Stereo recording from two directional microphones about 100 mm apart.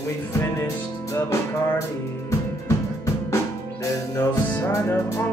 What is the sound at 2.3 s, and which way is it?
Music, 30° left (ahead or behind).